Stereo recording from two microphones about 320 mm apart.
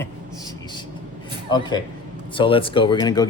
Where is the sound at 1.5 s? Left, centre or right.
Centre.